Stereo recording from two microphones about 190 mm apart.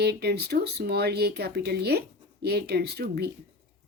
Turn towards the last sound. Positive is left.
turn(degrees=-60)  # may be behind; listen again after turning